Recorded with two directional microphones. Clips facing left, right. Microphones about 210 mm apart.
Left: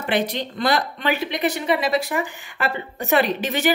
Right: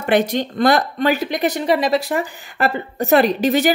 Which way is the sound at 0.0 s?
45° right (ahead or behind).